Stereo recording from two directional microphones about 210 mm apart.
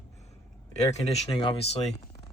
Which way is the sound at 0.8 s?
30° left (ahead or behind).